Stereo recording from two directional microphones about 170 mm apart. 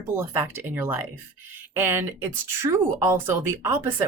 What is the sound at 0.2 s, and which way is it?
Speech, 15° right (ahead or behind).